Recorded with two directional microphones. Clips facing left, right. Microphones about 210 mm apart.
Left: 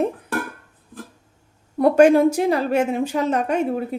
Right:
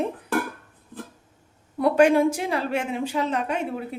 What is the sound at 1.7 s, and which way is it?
A woman's voice, 45° left (ahead or behind).